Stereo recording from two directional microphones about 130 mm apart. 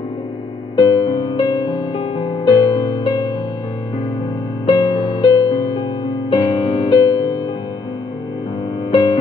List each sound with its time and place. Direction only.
0.7 s music: 35° left (ahead or behind)
4.6 s music: 35° left (ahead or behind)